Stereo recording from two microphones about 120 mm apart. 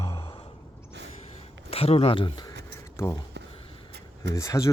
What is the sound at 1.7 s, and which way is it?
Speech, 55° left (ahead or behind).